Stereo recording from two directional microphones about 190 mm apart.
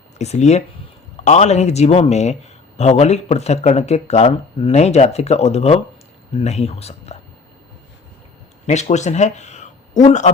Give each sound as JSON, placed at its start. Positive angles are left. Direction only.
{"t": 0.2, "sound": "speech", "side_deg": 35}
{"t": 8.6, "sound": "speech", "side_deg": 35}